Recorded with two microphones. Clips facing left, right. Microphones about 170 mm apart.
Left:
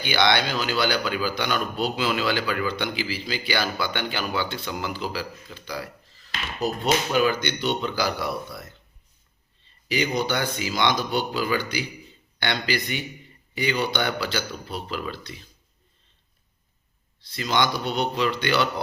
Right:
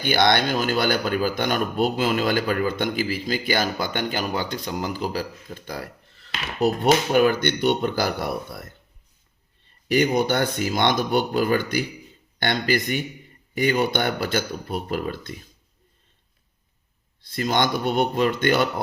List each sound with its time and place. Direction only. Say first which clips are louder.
0.0 s a man's voice: right 2 dB; 50° right (ahead or behind)
17.2 s a man's voice: right 2 dB; 50° right (ahead or behind)